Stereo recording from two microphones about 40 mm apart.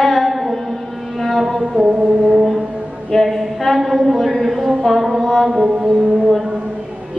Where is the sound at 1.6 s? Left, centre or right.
Right.